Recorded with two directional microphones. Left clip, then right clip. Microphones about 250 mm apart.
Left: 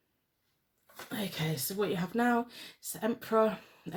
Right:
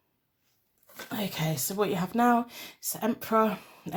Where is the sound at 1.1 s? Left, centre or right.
Right.